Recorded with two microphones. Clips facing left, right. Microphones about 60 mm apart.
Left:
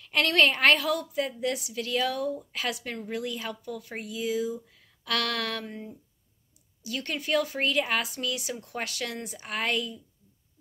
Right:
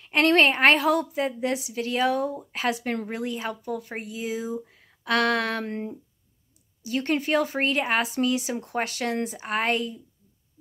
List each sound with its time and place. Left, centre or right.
0.0 s a woman's voice: right
5.7 s speech: right
6.8 s a woman's voice: right